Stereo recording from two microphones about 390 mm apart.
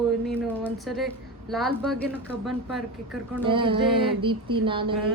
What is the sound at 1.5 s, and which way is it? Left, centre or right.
Speech, centre.